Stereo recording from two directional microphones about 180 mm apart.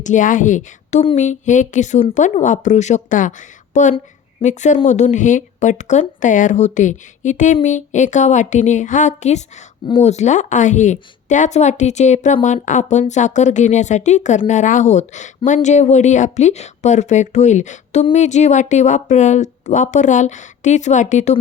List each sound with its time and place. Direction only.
0.0 s a woman's voice: 45° left (ahead or behind)